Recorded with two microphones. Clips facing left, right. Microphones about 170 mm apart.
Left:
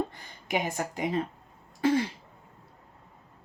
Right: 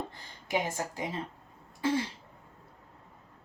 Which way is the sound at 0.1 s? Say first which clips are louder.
Left 1 dB; 15° left (ahead or behind).